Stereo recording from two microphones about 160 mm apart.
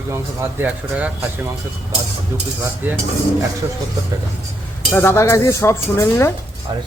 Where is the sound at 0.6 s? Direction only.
10° right (ahead or behind).